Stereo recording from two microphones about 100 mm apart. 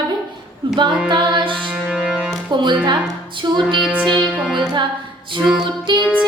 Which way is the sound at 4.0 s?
10° left (ahead or behind).